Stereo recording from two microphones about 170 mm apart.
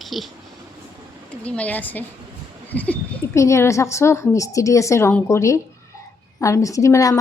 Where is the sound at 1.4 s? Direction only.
10° left (ahead or behind).